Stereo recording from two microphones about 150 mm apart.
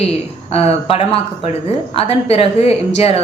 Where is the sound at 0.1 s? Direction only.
40° left (ahead or behind).